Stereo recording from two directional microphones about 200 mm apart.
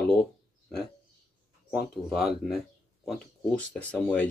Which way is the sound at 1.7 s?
Centre (ahead or behind).